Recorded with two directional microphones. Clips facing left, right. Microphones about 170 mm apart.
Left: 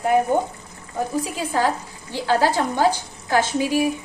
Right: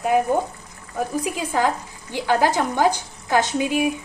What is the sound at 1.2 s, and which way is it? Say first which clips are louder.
A woman's voice: right 2 dB; 15° right (ahead or behind).